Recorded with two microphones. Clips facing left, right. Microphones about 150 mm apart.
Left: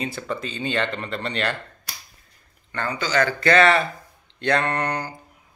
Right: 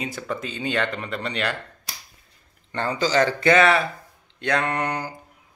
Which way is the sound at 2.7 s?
25° right (ahead or behind).